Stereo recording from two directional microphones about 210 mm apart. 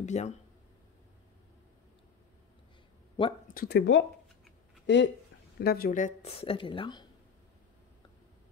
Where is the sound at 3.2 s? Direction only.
25° left (ahead or behind).